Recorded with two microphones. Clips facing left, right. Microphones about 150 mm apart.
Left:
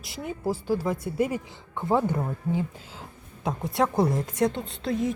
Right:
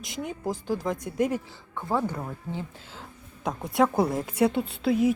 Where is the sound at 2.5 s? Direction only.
5° left (ahead or behind).